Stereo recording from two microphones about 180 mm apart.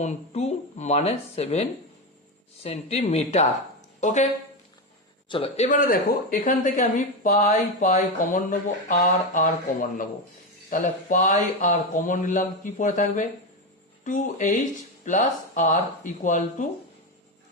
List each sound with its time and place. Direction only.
0.0 s speech: 40° left (ahead or behind)
2.6 s speech: 35° left (ahead or behind)
5.3 s speech: 30° left (ahead or behind)
5.6 s speech: 50° left (ahead or behind)
10.7 s speech: 45° left (ahead or behind)